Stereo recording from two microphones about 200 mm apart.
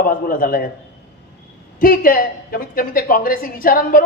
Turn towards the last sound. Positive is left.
turn(degrees=45)  # may be behind; listen again after turning